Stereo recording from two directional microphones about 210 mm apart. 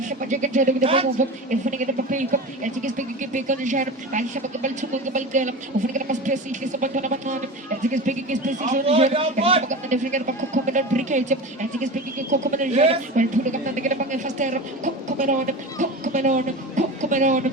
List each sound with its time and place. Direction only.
0.0 s speech: 35° right (ahead or behind)
12.5 s speech: 35° right (ahead or behind)